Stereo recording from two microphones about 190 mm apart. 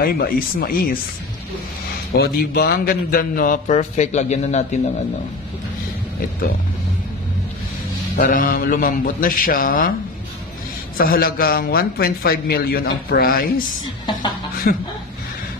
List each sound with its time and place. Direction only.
0.0 s a man's voice: 50° left (ahead or behind)
2.1 s a man's voice: 55° left (ahead or behind); by 5.0 s 35° left (ahead or behind)
8.2 s a man's voice: 45° left (ahead or behind)
11.0 s a man's voice: 50° left (ahead or behind)